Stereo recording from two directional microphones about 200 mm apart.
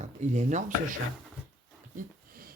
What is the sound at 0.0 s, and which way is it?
Speech, 35° right (ahead or behind).